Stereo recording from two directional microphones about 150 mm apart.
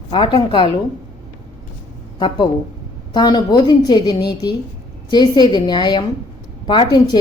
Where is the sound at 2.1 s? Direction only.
30° left (ahead or behind).